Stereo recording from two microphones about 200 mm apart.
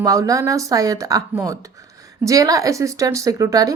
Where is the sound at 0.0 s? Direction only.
15° right (ahead or behind).